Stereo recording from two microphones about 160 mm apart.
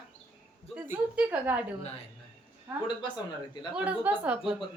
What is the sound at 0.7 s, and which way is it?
Speech, 10° right (ahead or behind).